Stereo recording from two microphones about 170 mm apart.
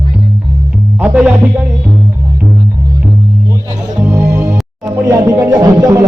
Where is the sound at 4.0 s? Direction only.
15° right (ahead or behind).